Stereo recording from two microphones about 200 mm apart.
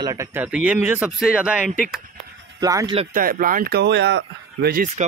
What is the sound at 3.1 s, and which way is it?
Speech, 45° right (ahead or behind).